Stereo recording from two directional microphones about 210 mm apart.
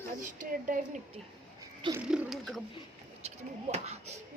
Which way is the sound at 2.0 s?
5° right (ahead or behind).